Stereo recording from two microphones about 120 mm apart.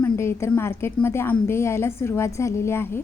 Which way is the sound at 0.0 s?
20° left (ahead or behind).